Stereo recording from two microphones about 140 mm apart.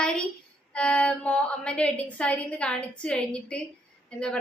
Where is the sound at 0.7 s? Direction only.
10° left (ahead or behind).